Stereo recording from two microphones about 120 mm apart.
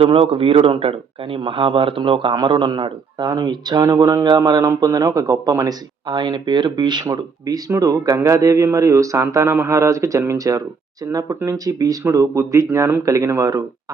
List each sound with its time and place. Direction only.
0.0 s a man's voice: 50° right (ahead or behind); by 13.7 s 30° right (ahead or behind)